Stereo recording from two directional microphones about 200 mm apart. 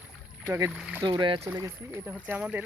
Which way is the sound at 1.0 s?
25° right (ahead or behind).